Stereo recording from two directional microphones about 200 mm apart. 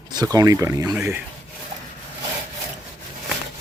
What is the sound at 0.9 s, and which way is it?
Speech, 5° right (ahead or behind).